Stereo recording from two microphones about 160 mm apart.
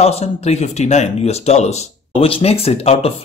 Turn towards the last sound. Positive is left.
turn(degrees=40)  # may be behind; listen again after turning